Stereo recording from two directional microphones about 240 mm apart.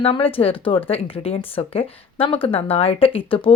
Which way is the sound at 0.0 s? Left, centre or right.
Left.